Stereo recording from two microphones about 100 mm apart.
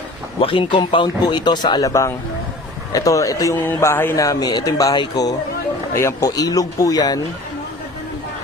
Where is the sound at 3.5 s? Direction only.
20° left (ahead or behind).